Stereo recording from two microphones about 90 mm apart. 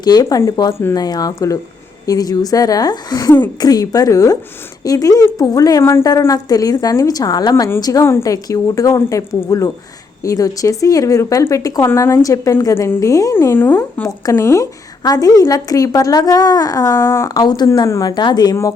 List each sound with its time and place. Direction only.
0.0 s a woman's voice: 45° left (ahead or behind)
0.7 s speech: 25° left (ahead or behind)
0.9 s a woman's voice: 45° left (ahead or behind)
5.8 s a woman's voice: 30° left (ahead or behind)
6.1 s a woman's voice: 40° left (ahead or behind)
8.0 s a woman's voice: 35° left (ahead or behind)
13.3 s speech: 25° left (ahead or behind)
14.3 s a woman's voice: 30° left (ahead or behind)
17.8 s a woman's voice: 35° left (ahead or behind)
18.1 s a woman's voice: 55° left (ahead or behind)